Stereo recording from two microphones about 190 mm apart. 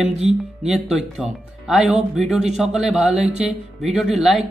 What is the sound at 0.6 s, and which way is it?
Speech, 5° right (ahead or behind).